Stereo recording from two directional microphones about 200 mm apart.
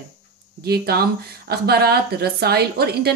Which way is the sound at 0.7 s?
50° right (ahead or behind).